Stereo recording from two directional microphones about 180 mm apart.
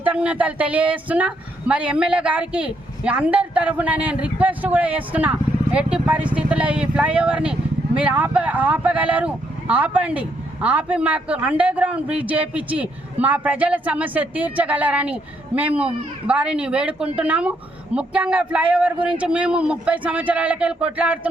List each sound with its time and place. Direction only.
0.0 s a woman's voice: 5° right (ahead or behind)